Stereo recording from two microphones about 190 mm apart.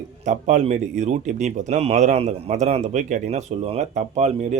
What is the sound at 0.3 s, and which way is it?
Speech, 40° right (ahead or behind).